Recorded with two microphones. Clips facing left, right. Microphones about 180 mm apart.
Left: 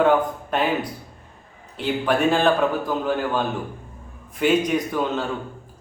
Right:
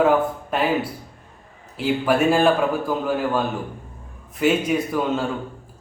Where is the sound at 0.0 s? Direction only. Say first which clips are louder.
Even; 5° right (ahead or behind).